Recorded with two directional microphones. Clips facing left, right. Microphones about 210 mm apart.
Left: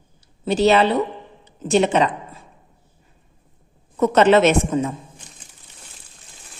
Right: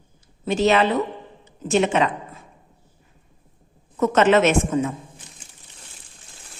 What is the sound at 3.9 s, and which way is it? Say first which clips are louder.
Speech: left 2 dB; 35° left (ahead or behind).